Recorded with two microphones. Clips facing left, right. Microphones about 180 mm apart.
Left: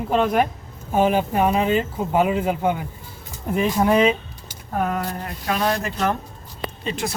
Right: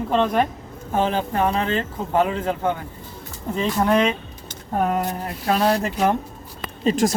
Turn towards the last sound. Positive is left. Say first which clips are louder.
# right 8 dB
turn(degrees=-45)  # may be behind; listen again after turning